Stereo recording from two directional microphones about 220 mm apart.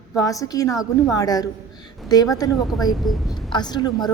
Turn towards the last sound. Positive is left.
turn(degrees=20)  # may be behind; listen again after turning